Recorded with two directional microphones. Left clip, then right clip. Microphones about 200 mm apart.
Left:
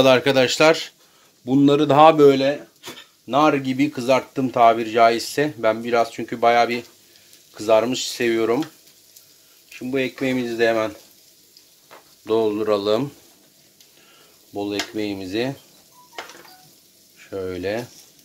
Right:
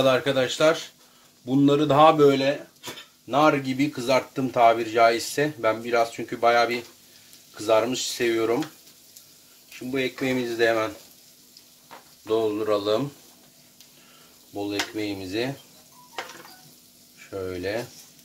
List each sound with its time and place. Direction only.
0.0 s speech: 45° left (ahead or behind)
9.8 s speech: 40° left (ahead or behind)
12.3 s speech: 50° left (ahead or behind)
14.5 s speech: 40° left (ahead or behind)
17.3 s speech: 45° left (ahead or behind)